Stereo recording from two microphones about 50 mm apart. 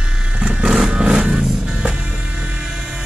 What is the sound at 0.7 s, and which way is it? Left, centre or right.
Music, centre.